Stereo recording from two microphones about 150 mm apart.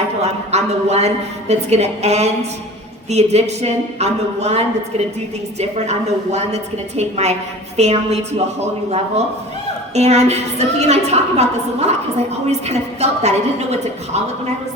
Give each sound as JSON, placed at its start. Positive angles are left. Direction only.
{"t": 0.2, "sound": "a woman's voice", "side_deg": -45}
{"t": 9.9, "sound": "a woman's voice", "side_deg": -45}